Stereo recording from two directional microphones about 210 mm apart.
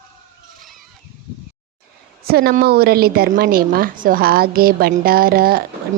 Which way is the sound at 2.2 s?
45° right (ahead or behind).